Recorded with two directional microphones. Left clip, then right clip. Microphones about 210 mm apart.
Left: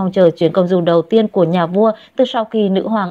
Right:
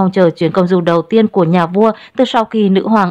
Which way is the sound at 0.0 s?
15° right (ahead or behind).